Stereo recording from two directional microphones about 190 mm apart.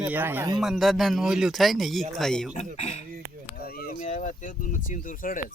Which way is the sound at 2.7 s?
35° left (ahead or behind).